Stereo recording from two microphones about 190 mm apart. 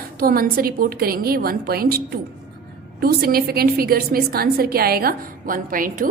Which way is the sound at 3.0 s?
50° right (ahead or behind).